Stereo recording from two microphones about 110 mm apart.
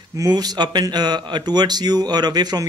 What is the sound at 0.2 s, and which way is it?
Speech, 35° right (ahead or behind).